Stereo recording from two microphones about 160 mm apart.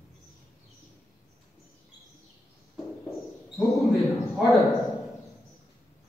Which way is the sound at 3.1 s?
Centre (ahead or behind).